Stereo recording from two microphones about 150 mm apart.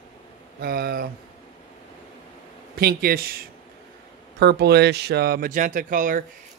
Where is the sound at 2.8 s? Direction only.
85° right; by 6.2 s 65° right (ahead or behind).